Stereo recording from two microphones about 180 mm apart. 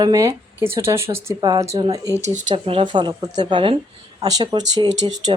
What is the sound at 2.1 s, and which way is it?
Speech, 40° right (ahead or behind).